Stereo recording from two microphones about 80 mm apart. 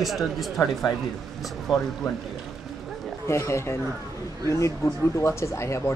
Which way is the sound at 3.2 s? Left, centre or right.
Left.